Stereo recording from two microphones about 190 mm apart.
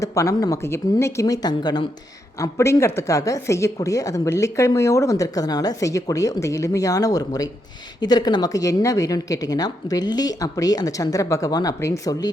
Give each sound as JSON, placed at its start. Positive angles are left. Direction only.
{"t": 0.0, "sound": "a woman's voice", "side_deg": 15}